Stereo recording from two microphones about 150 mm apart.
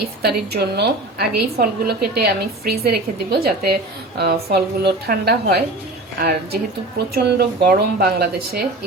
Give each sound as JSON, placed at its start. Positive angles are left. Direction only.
{"t": 0.2, "sound": "a woman's voice", "side_deg": -90}